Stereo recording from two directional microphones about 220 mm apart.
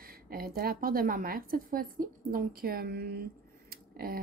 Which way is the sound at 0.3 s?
45° right (ahead or behind).